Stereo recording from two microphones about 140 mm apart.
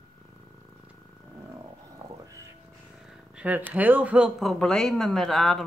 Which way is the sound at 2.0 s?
20° right (ahead or behind).